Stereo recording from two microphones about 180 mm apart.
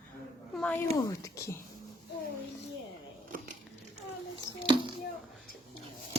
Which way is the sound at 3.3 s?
50° right (ahead or behind).